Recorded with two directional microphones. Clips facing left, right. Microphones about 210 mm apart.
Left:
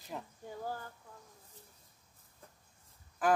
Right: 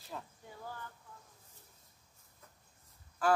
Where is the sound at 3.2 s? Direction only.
15° left (ahead or behind).